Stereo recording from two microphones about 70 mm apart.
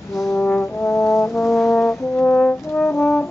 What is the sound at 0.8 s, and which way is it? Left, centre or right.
Brass instrument, left.